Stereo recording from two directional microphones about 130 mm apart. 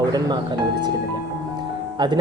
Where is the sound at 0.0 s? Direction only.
35° right (ahead or behind).